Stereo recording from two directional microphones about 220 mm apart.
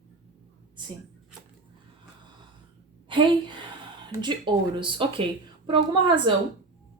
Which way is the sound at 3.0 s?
20° right (ahead or behind).